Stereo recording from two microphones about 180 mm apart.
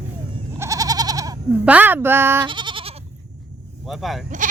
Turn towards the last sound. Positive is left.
turn(degrees=0)  # may be behind; listen again after turning